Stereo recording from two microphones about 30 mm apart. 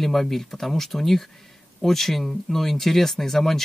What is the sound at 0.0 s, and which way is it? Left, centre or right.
Speech, centre.